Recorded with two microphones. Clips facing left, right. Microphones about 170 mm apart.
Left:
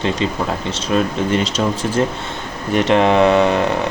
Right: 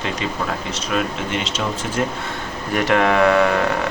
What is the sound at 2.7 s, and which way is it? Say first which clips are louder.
Speech: left 4 dB; 20° left (ahead or behind).